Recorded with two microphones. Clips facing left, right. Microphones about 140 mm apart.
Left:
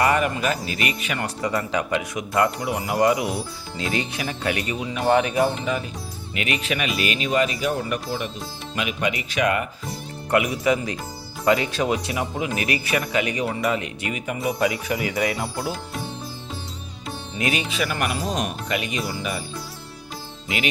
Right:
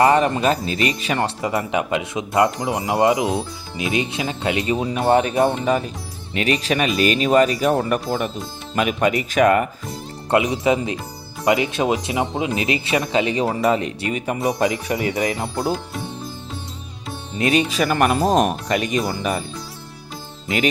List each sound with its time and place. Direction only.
0.0 s speech: 30° right (ahead or behind)
4.8 s speech: 35° right (ahead or behind)
5.4 s speech: 45° right (ahead or behind)
10.2 s speech: 25° right (ahead or behind)
17.3 s speech: 35° right (ahead or behind)